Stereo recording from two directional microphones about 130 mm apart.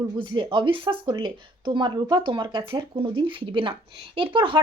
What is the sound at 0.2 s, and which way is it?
Speech, 40° right (ahead or behind).